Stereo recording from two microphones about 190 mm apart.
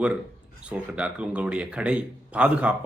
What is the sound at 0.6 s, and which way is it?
Speech, 5° right (ahead or behind).